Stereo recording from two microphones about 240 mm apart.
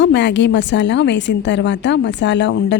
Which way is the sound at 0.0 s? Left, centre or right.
Left.